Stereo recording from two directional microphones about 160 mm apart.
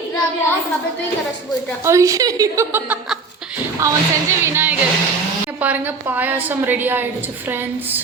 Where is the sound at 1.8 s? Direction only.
20° right (ahead or behind).